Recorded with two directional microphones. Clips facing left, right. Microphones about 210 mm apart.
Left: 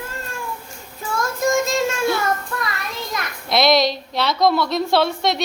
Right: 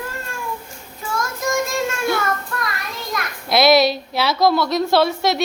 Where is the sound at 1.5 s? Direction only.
25° left (ahead or behind).